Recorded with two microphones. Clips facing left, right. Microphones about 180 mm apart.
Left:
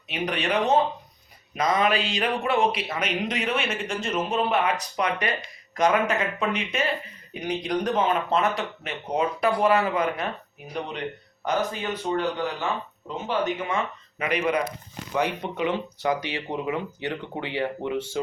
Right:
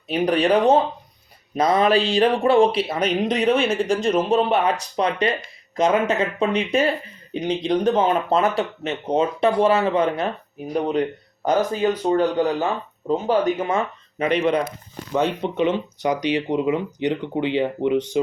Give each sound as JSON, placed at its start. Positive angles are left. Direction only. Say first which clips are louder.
{"t": 0.1, "sound": "speech", "louder": "right 8 dB", "side_deg": -35}
{"t": 10.8, "sound": "speech", "louder": "right 10 dB", "side_deg": -40}